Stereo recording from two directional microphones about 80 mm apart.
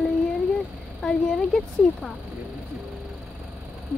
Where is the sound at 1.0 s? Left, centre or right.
Centre.